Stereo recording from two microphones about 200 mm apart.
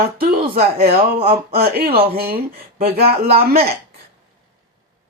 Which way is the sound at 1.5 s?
50° right (ahead or behind).